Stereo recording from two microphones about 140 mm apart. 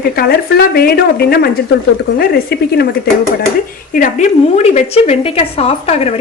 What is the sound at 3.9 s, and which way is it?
A woman's voice, 65° left (ahead or behind).